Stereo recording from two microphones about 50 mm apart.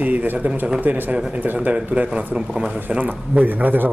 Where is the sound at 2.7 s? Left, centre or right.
Right.